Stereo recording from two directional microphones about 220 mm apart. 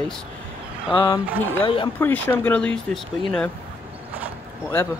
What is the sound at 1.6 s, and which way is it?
Speech, 25° left (ahead or behind).